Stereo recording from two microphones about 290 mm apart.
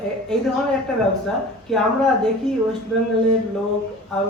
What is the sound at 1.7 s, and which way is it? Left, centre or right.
Speech, centre.